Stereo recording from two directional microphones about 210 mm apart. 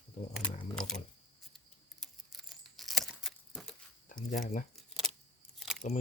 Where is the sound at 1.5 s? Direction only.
Centre (ahead or behind).